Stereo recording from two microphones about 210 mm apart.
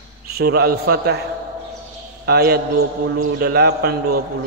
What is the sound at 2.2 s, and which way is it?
Music, 50° right (ahead or behind).